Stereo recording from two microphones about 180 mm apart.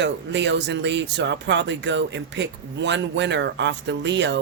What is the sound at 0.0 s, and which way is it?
Speech, 75° right (ahead or behind).